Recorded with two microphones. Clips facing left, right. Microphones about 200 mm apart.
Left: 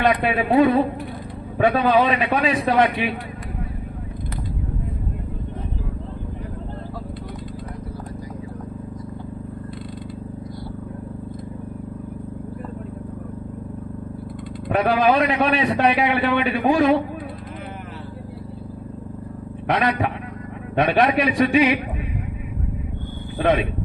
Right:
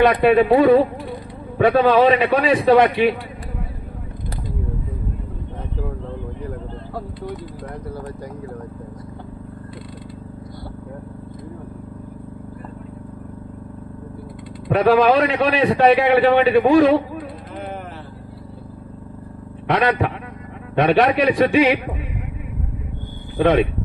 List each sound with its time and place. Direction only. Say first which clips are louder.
0.0 s a man's voice: right 6 dB; 60° right (ahead or behind)
14.7 s a man's voice: right 4 dB; 60° right (ahead or behind)
19.7 s a man's voice: right 3 dB; 60° right (ahead or behind)
23.4 s a man's voice: right 4 dB; 60° right (ahead or behind)